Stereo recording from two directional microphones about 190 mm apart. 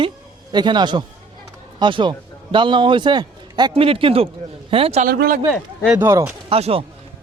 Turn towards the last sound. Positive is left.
turn(degrees=-30)  # may be behind; listen again after turning